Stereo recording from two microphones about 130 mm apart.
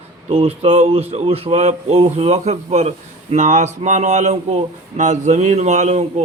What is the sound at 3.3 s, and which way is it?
A man's voice, 70° right (ahead or behind).